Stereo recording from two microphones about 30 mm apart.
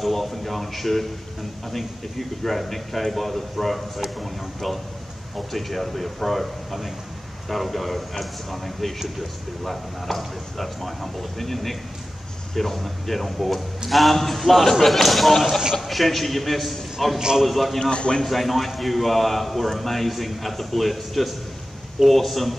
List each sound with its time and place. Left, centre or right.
0.0 s a man's voice: centre
17.9 s a man's voice: left
18.2 s a man's voice: centre